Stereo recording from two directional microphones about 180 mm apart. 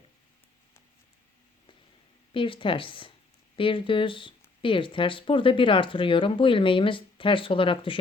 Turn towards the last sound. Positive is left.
turn(degrees=30)  # may be behind; listen again after turning